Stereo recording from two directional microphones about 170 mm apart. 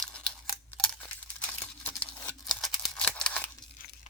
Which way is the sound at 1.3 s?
10° left (ahead or behind).